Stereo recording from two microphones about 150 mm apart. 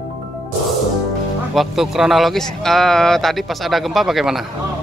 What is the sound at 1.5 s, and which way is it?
Speech, centre (ahead or behind).